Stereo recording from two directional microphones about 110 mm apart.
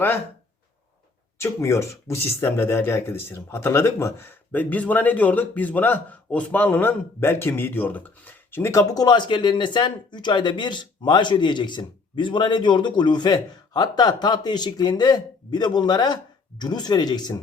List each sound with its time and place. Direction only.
1.4 s speech: 25° left (ahead or behind)